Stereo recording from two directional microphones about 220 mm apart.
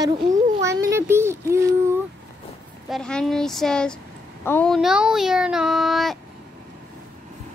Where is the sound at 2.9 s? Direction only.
Centre (ahead or behind).